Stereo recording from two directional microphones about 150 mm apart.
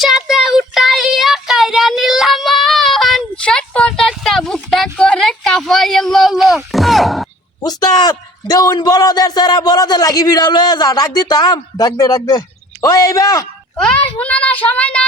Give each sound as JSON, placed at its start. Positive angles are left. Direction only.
{"t": 0.0, "sound": "child singing", "side_deg": 0}
{"t": 7.6, "sound": "a sound", "side_deg": 25}
{"t": 12.8, "sound": "speech", "side_deg": 25}
{"t": 13.7, "sound": "a child's voice", "side_deg": 5}